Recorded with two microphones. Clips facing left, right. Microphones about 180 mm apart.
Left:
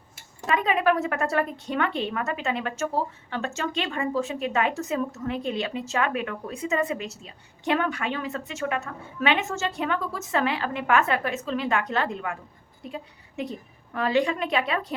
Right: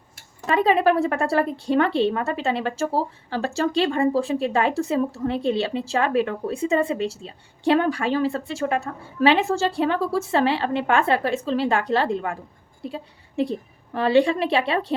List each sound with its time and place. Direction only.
0.4 s a woman's voice: 30° right (ahead or behind)